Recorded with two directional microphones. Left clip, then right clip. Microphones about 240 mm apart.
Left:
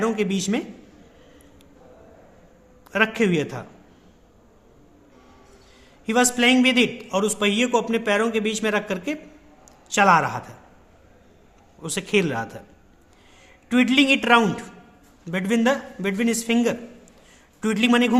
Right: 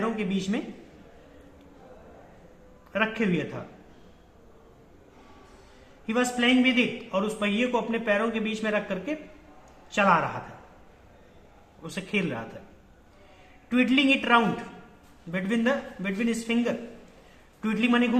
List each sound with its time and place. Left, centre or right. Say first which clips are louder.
0.0 s speech: left 6 dB; left
2.9 s a man's voice: left 6 dB; left
6.1 s a man's voice: left 6 dB; left
11.8 s a man's voice: left 8 dB; left
13.7 s a man's voice: left 4 dB; left